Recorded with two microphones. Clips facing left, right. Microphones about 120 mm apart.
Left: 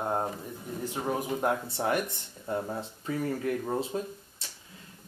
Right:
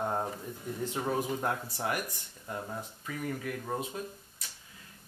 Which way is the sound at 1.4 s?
25° left (ahead or behind).